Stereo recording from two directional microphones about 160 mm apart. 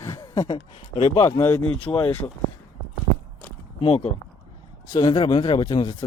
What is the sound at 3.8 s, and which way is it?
Speech, 35° left (ahead or behind).